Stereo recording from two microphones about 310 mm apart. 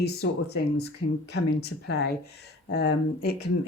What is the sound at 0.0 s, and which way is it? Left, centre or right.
Speech, left.